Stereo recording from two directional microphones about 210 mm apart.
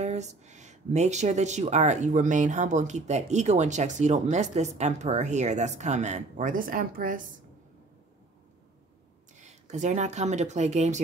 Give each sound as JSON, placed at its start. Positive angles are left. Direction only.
{"t": 0.0, "sound": "speech", "side_deg": -35}
{"t": 9.4, "sound": "speech", "side_deg": -35}